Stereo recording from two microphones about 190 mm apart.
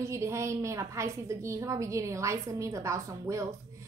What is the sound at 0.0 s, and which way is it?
A woman's voice, 15° right (ahead or behind).